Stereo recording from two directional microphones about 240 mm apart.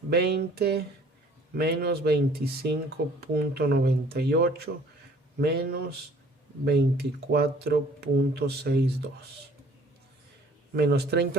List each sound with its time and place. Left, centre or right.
0.1 s speech: right
10.8 s speech: right